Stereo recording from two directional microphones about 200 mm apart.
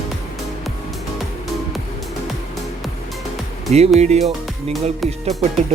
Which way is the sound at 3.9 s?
35° right (ahead or behind).